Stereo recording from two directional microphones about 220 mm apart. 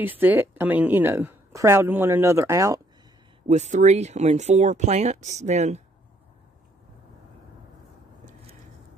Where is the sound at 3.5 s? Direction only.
30° right (ahead or behind).